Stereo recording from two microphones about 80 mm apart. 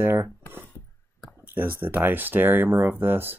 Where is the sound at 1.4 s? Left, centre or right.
Right.